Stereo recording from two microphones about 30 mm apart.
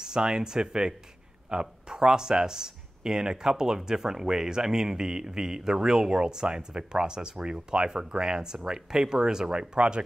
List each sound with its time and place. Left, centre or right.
0.0 s speech: right